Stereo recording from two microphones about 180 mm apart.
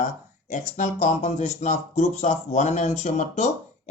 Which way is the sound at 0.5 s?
45° left (ahead or behind).